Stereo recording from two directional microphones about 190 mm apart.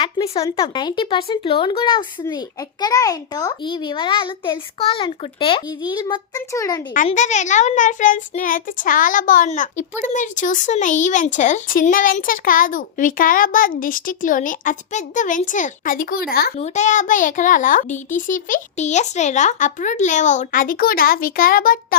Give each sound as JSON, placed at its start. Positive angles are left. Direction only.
{"t": 0.5, "sound": "a child's voice", "side_deg": 25}
{"t": 6.9, "sound": "speech", "side_deg": 40}
{"t": 16.6, "sound": "speech", "side_deg": 35}